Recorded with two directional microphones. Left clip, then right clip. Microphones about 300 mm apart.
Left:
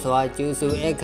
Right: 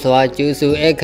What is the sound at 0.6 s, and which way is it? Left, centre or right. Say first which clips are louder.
Music: right 10 dB; right.